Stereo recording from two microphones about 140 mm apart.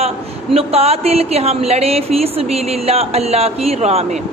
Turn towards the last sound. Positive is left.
turn(degrees=-45)  # may be behind; listen again after turning